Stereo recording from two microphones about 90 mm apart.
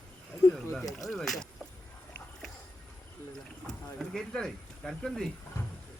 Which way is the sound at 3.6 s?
5° left (ahead or behind).